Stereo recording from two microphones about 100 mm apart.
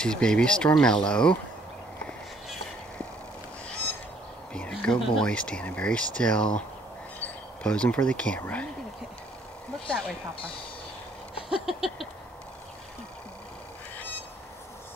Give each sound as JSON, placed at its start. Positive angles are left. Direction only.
{"t": 0.0, "sound": "speech", "side_deg": 10}
{"t": 4.6, "sound": "speech", "side_deg": 5}
{"t": 11.4, "sound": "a sound", "side_deg": -5}